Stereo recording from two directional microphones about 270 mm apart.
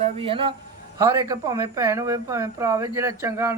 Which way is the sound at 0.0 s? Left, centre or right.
Centre.